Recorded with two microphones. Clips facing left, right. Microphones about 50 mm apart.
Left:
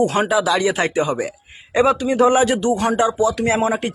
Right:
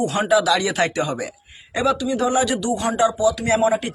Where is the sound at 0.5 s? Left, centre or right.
Centre.